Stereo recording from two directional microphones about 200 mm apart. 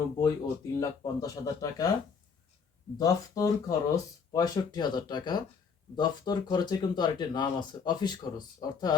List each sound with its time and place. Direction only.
0.2 s speech: 15° left (ahead or behind)
3.0 s speech: 15° left (ahead or behind)